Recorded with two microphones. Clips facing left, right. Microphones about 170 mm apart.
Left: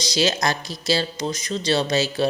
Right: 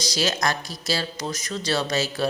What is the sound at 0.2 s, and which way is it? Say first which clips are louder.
Mantra: left 3 dB; 25° left (ahead or behind).